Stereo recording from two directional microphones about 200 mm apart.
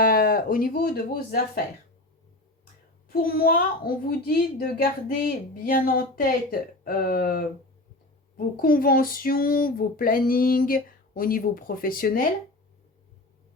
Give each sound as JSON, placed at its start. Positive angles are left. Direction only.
{"t": 0.0, "sound": "speech", "side_deg": 45}
{"t": 3.1, "sound": "a child's voice", "side_deg": 45}
{"t": 8.5, "sound": "a child's voice", "side_deg": 45}